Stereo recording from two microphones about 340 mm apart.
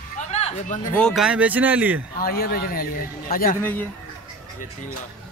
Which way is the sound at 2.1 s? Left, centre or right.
Left.